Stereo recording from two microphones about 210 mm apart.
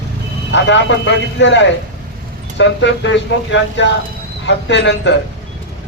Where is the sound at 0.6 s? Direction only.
60° left (ahead or behind).